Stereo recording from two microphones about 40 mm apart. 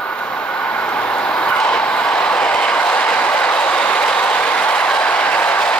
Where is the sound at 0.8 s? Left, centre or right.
Left.